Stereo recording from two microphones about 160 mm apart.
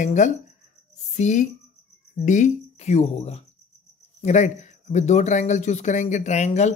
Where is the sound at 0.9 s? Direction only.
50° left (ahead or behind).